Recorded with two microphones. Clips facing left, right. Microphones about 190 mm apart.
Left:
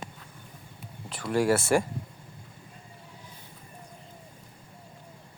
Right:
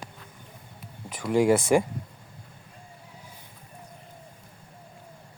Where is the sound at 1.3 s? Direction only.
15° right (ahead or behind).